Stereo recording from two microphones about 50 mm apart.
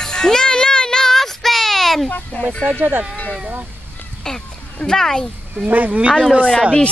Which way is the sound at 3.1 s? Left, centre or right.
Left.